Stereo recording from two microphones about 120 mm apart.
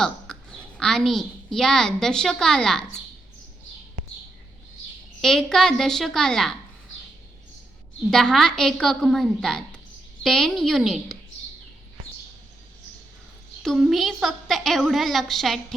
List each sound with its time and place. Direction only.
0.3 s a sound: 5° left (ahead or behind)
0.8 s a woman's voice: 5° left (ahead or behind)
5.2 s a woman's voice: 5° left (ahead or behind)
8.1 s a woman's voice: 5° left (ahead or behind)
13.6 s a woman's voice: centre (ahead or behind)